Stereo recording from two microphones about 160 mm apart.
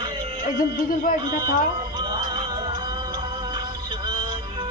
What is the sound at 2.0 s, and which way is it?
Music, 25° right (ahead or behind).